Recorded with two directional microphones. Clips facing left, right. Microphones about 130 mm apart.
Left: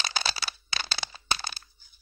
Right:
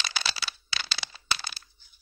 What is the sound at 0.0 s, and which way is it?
Crack, 45° left (ahead or behind).